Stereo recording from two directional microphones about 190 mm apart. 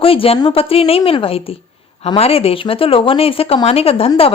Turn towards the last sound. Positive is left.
turn(degrees=30)  # may be behind; listen again after turning